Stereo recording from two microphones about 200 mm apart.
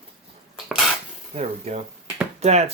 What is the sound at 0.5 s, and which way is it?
Dishes, centre (ahead or behind).